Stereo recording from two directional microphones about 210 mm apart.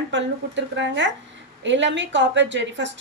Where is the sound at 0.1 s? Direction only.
60° right (ahead or behind).